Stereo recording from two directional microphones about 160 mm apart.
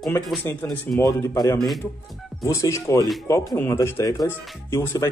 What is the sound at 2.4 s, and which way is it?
Speech, 20° left (ahead or behind).